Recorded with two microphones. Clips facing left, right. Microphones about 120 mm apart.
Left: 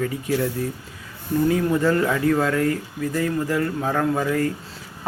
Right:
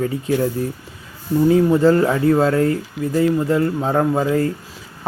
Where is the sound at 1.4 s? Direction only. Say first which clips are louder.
Right 7 dB; 30° right (ahead or behind).